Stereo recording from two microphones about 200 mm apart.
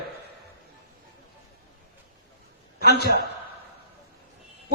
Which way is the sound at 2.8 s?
55° left (ahead or behind).